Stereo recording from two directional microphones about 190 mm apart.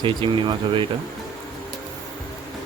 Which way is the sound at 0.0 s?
25° right (ahead or behind).